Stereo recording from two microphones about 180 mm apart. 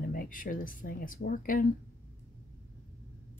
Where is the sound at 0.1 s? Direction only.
50° left (ahead or behind).